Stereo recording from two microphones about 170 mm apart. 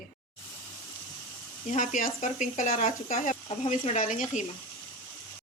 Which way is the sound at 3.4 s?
35° left (ahead or behind).